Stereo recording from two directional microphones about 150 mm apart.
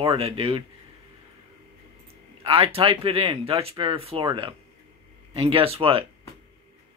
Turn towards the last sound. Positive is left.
turn(degrees=-35)  # may be behind; listen again after turning